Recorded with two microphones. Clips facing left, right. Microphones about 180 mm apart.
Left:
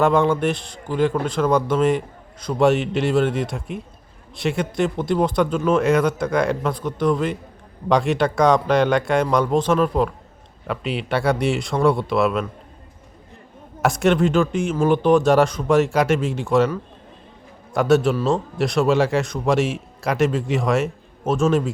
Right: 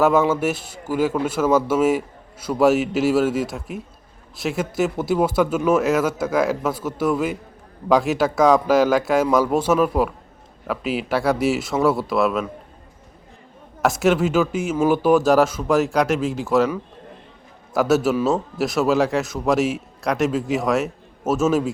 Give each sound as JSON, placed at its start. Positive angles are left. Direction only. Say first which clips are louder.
{"t": 0.0, "sound": "a man's voice", "louder": "even", "side_deg": -5}
{"t": 13.8, "sound": "a man's voice", "louder": "even", "side_deg": 0}